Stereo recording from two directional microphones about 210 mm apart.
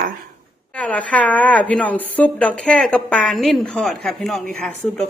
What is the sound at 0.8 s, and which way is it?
A woman's voice, 5° left (ahead or behind).